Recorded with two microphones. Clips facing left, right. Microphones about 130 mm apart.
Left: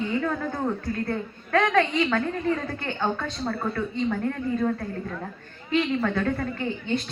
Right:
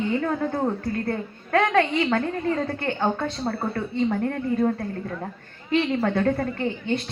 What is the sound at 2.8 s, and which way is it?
Speech, 45° right (ahead or behind).